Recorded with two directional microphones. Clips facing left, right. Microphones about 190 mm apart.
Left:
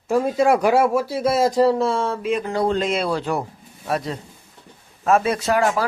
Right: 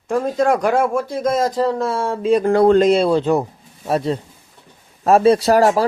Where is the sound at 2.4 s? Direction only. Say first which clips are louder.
Right 12 dB; 55° right (ahead or behind).